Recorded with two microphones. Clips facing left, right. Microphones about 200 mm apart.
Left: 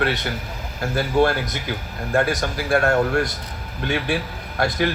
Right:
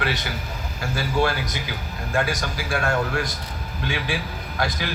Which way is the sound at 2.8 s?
40° left (ahead or behind).